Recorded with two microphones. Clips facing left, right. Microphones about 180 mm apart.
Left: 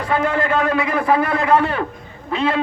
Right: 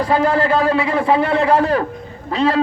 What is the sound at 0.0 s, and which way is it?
A man's voice, 35° right (ahead or behind).